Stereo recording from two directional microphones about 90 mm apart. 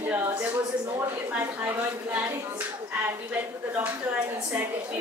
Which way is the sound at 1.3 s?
20° right (ahead or behind).